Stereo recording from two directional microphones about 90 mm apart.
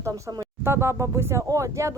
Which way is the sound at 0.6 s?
30° right (ahead or behind).